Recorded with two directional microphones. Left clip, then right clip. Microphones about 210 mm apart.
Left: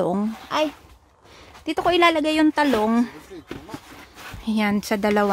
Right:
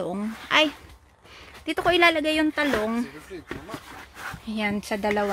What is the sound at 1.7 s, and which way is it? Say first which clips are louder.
Speech: left 2 dB; 20° left (ahead or behind).